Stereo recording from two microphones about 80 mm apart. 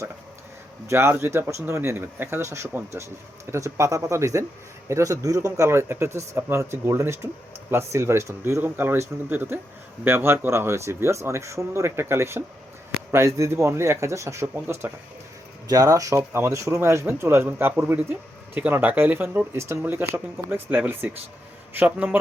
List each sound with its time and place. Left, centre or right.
0.9 s speech: right
15.6 s speech: right; by 22.2 s centre